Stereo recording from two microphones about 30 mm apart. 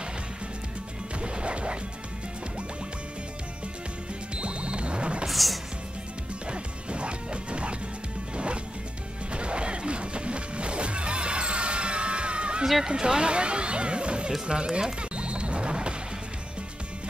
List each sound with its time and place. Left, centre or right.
1.2 s smash: right
4.4 s music: right
5.3 s music: centre
6.4 s music: right
9.3 s music: right
12.8 s music: right
14.4 s speech: right
15.0 s music: right